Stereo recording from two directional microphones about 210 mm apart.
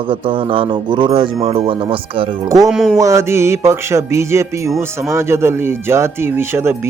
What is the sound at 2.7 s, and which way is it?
Music, centre (ahead or behind).